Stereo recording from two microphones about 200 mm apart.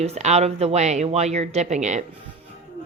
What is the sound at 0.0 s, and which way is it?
A woman's voice, 35° right (ahead or behind).